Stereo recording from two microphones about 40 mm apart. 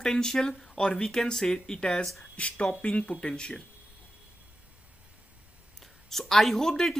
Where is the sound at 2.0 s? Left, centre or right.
Centre.